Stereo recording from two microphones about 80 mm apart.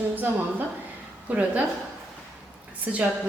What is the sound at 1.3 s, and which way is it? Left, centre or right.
Speech, centre.